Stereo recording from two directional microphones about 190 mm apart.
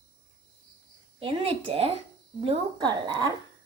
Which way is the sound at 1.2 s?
30° right (ahead or behind).